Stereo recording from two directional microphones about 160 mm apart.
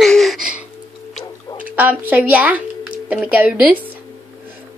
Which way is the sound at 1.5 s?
10° right (ahead or behind).